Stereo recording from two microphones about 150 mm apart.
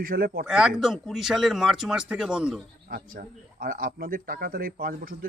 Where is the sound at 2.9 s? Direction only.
75° right (ahead or behind).